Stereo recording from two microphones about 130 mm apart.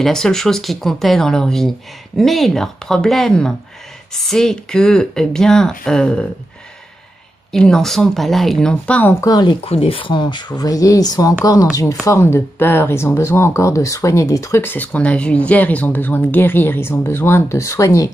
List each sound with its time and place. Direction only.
0.0 s speech: 5° left (ahead or behind)
7.5 s speech: 5° left (ahead or behind)
9.2 s speech: 30° left (ahead or behind)
9.6 s speech: 45° left (ahead or behind); by 18.1 s 25° left (ahead or behind)